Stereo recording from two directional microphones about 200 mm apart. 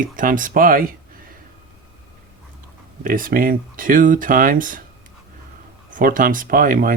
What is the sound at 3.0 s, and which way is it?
Speech, 45° right (ahead or behind).